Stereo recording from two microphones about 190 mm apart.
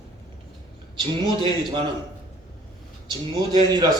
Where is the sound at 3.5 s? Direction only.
20° right (ahead or behind).